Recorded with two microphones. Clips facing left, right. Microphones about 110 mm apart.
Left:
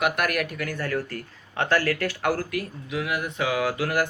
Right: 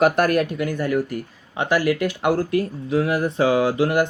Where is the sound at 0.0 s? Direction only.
30° right (ahead or behind).